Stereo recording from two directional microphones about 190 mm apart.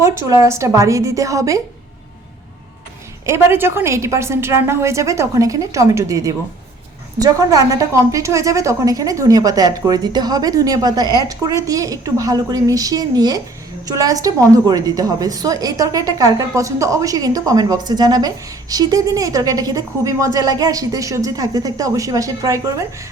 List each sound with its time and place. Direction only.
0.0 s a woman's voice: 15° right (ahead or behind)
3.2 s a woman's voice: 15° right (ahead or behind)